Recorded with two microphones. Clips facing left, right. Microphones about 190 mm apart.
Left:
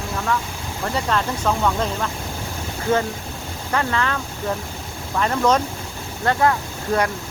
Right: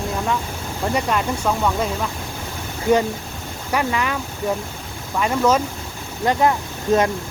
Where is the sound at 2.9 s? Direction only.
20° right (ahead or behind).